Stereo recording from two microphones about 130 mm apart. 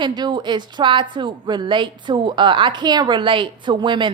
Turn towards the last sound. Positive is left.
turn(degrees=-35)  # may be behind; listen again after turning